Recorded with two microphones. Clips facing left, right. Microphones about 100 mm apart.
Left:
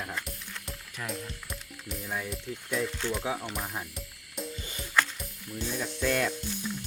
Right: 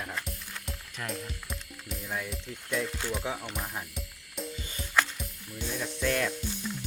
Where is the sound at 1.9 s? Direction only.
5° left (ahead or behind).